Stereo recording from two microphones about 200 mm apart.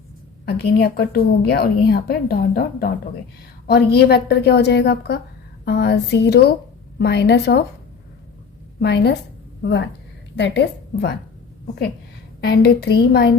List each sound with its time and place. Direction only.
0.4 s a woman's voice: 55° left (ahead or behind)
8.8 s a woman's voice: 55° left (ahead or behind)
10.3 s a woman's voice: 60° left (ahead or behind)
12.4 s a woman's voice: 55° left (ahead or behind)